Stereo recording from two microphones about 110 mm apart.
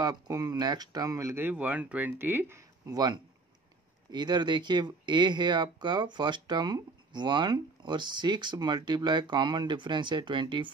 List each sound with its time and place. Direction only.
0.0 s speech: 35° right (ahead or behind); by 2.6 s 20° right (ahead or behind)
2.9 s speech: 35° right (ahead or behind)